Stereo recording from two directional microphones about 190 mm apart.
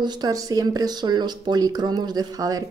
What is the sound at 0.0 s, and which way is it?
Speech, 20° right (ahead or behind).